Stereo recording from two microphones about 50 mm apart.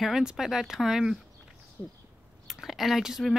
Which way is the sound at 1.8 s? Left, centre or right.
Left.